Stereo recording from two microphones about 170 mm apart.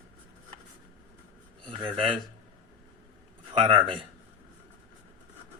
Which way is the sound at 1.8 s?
30° right (ahead or behind).